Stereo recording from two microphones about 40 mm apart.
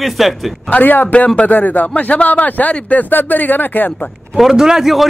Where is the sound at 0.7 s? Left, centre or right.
Left.